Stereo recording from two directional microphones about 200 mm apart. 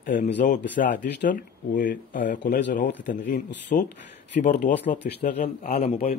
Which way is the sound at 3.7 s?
40° left (ahead or behind).